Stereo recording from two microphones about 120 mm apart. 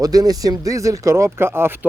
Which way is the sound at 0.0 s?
30° right (ahead or behind).